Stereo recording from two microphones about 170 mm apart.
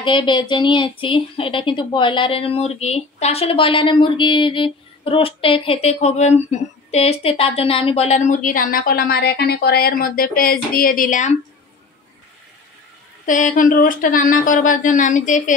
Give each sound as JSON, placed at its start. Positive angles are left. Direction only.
{"t": 0.0, "sound": "speech", "side_deg": 30}
{"t": 13.2, "sound": "speech", "side_deg": 50}